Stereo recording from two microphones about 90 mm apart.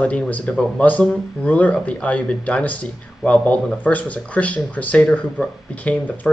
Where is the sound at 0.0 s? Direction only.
15° left (ahead or behind).